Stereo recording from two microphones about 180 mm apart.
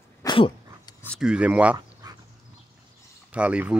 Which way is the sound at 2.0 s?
20° right (ahead or behind).